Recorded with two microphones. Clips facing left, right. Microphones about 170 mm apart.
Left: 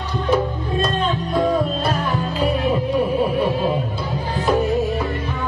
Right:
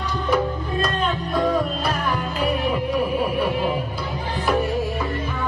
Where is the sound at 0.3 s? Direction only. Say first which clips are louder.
Left 2 dB; 25° left (ahead or behind).